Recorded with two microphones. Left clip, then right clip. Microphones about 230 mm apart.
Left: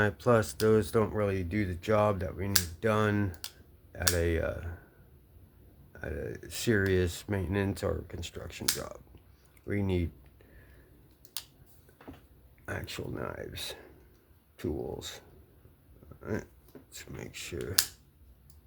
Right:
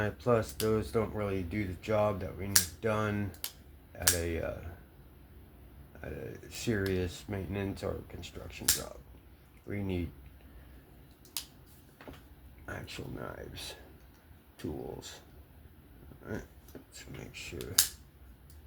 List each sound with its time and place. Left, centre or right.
0.0 s speech: left
6.0 s speech: left
9.6 s speech: left
12.6 s speech: left
16.2 s speech: left